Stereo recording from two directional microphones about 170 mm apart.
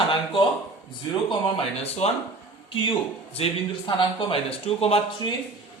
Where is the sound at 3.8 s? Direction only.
30° left (ahead or behind).